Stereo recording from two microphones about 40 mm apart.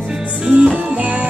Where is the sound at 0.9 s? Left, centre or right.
Right.